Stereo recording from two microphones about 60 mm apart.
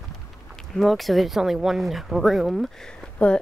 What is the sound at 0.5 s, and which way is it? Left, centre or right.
Speech, centre.